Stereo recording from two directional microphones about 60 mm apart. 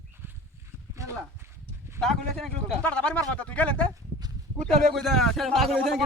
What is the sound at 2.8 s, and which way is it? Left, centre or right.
A man's voice, left.